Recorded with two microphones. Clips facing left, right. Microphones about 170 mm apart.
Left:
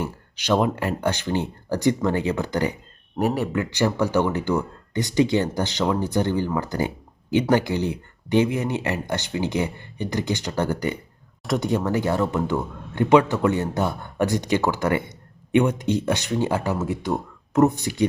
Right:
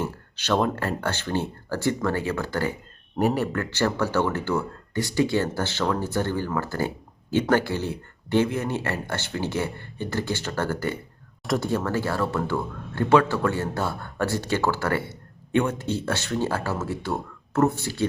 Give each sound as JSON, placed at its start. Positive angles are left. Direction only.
{"t": 0.0, "sound": "speech", "side_deg": 10}
{"t": 3.2, "sound": "speech", "side_deg": 0}
{"t": 3.5, "sound": "speech", "side_deg": 15}